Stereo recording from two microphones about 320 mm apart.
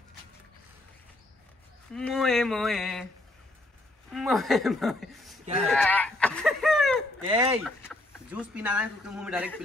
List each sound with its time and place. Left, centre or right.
2.0 s speech: centre
4.1 s a woman's voice: centre
5.4 s speech: right
5.7 s a sound: centre
7.2 s speech: centre
7.6 s speech: centre